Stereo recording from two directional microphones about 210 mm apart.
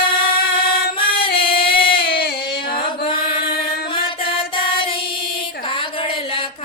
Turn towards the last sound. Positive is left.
turn(degrees=25)  # may be behind; listen again after turning